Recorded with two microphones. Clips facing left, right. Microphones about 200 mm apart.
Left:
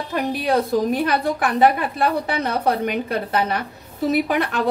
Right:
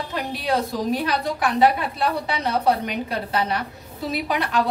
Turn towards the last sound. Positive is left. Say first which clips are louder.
# left 3 dB
turn(degrees=55)  # may be behind; listen again after turning